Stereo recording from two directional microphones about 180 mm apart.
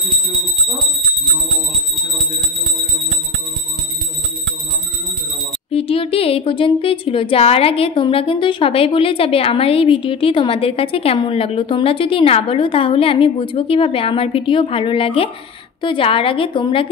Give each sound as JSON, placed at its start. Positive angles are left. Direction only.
{"t": 5.7, "sound": "a woman's voice", "side_deg": 30}